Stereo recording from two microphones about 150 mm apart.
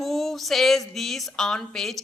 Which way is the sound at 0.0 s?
Centre (ahead or behind).